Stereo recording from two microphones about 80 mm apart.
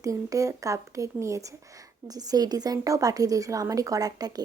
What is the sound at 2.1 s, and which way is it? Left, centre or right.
Speech, right.